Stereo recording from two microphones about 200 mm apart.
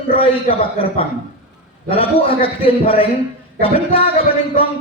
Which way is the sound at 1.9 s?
25° left (ahead or behind).